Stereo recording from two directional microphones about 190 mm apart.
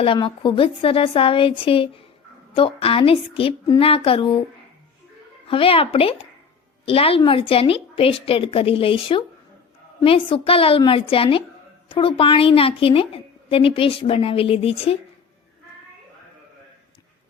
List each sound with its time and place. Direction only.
0.0 s a woman's voice: 25° left (ahead or behind)
5.5 s a woman's voice: 30° left (ahead or behind)